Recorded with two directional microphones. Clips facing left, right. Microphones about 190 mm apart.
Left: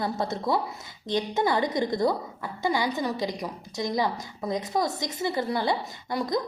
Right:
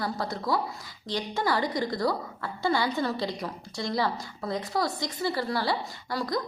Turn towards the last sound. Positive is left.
turn(degrees=20)  # may be behind; listen again after turning